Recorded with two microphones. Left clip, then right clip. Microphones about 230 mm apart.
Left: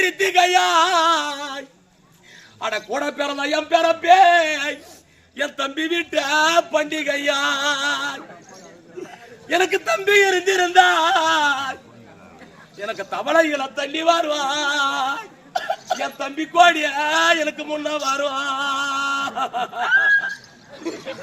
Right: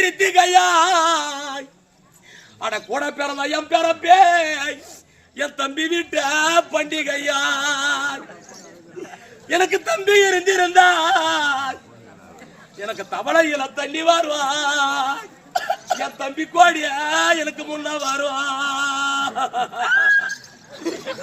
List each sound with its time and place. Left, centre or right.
0.0 s a man's voice: centre
9.5 s speech: centre
12.8 s a man's voice: centre
15.5 s a sound: centre
16.0 s a man's voice: centre
19.8 s a sound: centre